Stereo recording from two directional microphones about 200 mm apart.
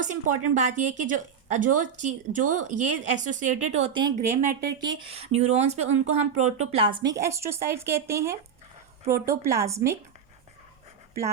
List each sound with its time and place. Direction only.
0.0 s speech: 35° right (ahead or behind); by 10.0 s 15° right (ahead or behind)